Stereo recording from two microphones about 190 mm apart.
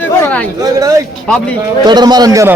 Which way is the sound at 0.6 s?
20° right (ahead or behind).